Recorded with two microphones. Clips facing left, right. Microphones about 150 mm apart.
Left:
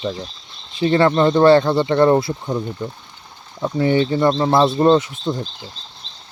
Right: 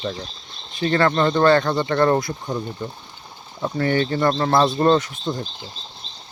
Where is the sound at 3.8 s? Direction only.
20° left (ahead or behind).